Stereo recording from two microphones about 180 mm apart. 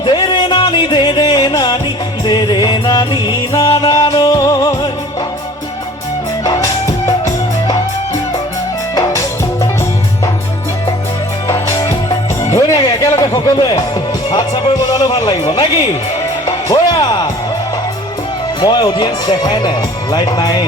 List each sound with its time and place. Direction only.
0.0 s music: 25° left (ahead or behind)
6.4 s music: 20° left (ahead or behind)
9.0 s music: 20° left (ahead or behind)
11.4 s music: 20° left (ahead or behind)
16.5 s music: 20° left (ahead or behind)
18.6 s speech: 20° left (ahead or behind)